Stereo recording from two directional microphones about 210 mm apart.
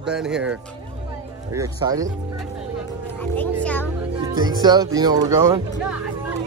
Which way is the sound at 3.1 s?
5° left (ahead or behind).